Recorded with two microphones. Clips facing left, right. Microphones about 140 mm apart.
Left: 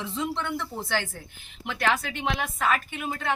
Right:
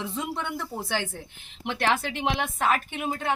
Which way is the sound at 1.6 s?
25° right (ahead or behind).